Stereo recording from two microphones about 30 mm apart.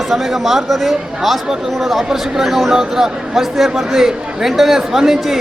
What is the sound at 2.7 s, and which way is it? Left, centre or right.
Speech, centre.